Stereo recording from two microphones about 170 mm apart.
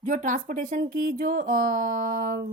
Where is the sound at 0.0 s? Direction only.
50° right (ahead or behind).